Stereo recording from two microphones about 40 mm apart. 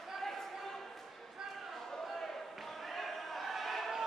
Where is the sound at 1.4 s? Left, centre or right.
Centre.